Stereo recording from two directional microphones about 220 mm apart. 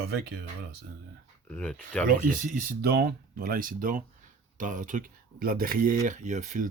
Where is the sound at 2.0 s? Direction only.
35° right (ahead or behind).